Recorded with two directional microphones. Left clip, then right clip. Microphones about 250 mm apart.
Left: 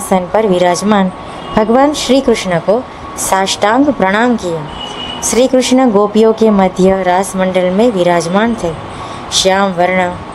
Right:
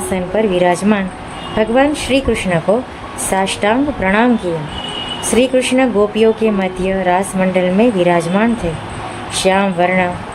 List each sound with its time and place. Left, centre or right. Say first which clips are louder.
0.1 s speech: left 5 dB; left
5.3 s speech: left 3 dB; left